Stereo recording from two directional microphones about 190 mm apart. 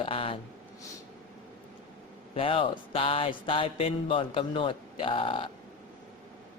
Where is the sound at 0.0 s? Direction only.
30° left (ahead or behind).